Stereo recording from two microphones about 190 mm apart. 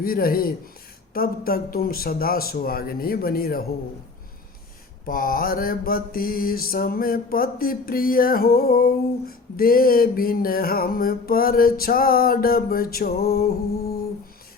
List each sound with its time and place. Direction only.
0.0 s mantra: 50° left (ahead or behind)
5.0 s mantra: 50° left (ahead or behind)